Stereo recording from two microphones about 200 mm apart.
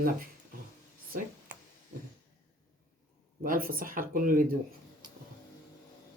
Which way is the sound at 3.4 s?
45° right (ahead or behind).